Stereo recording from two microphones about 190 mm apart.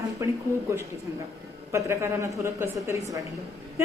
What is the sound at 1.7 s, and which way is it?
Speech, 15° right (ahead or behind).